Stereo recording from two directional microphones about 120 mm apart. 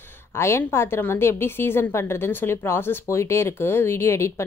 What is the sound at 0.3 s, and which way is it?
A woman's voice, 20° left (ahead or behind).